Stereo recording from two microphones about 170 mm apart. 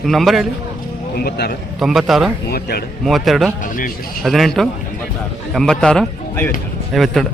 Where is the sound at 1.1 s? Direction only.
65° left (ahead or behind).